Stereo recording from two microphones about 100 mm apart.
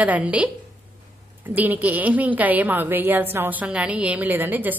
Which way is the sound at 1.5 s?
15° right (ahead or behind).